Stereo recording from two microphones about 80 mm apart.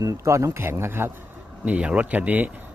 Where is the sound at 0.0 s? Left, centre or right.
Right.